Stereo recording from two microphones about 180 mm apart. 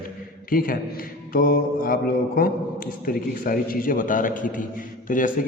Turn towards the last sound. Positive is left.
turn(degrees=50)  # may be behind; listen again after turning